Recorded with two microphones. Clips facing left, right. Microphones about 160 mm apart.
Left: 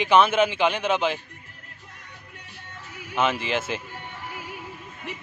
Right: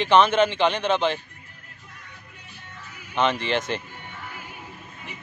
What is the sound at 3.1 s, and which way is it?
Speech, 5° left (ahead or behind).